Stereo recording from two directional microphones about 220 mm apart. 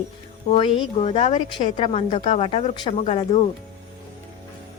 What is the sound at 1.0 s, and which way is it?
A woman's voice, 30° left (ahead or behind).